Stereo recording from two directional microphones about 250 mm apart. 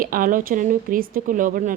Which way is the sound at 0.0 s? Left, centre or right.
Right.